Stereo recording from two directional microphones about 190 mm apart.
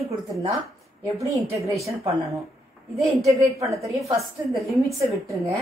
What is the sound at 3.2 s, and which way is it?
Speech, 15° right (ahead or behind).